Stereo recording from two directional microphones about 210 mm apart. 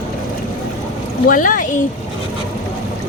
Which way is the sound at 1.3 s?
40° left (ahead or behind).